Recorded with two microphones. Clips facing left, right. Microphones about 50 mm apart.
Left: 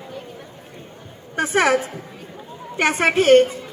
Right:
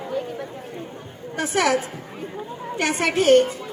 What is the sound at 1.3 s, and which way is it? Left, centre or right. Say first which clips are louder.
Speech: left 4 dB; left.